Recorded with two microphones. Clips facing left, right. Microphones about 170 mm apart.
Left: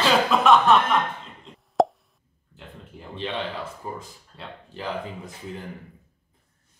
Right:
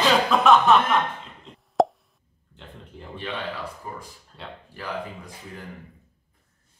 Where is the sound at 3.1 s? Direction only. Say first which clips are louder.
Left 2 dB; 25° left (ahead or behind).